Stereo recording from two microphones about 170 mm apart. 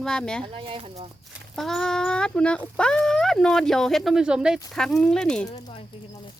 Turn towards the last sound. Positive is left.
turn(degrees=25)  # may be behind; listen again after turning